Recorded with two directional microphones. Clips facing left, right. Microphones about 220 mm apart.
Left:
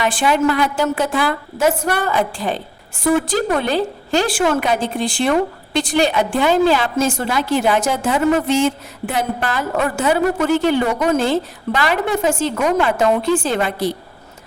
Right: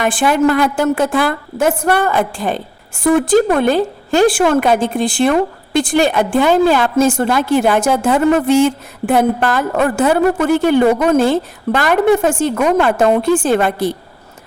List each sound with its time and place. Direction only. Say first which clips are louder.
0.0 s a woman's voice: right 3 dB; 50° right (ahead or behind)